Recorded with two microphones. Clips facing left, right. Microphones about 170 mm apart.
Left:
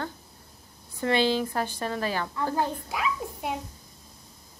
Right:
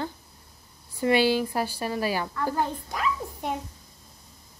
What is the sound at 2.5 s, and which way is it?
A child's voice, 5° left (ahead or behind).